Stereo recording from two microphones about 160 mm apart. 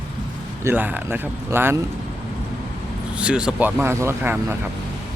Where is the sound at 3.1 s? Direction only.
5° right (ahead or behind).